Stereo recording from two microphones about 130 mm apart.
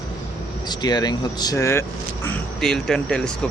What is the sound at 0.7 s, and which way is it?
Speech, 30° left (ahead or behind).